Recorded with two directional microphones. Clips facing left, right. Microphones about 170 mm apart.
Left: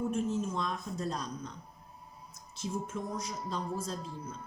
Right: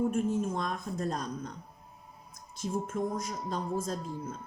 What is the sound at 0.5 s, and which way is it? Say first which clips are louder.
Speech: right 2 dB; 50° right (ahead or behind).